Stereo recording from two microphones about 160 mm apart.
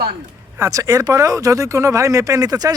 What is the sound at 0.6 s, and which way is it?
Speech, 20° right (ahead or behind).